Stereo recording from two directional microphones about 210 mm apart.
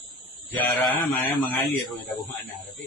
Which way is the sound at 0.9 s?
10° left (ahead or behind).